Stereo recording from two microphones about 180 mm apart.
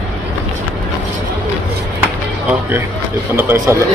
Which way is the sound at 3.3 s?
15° right (ahead or behind).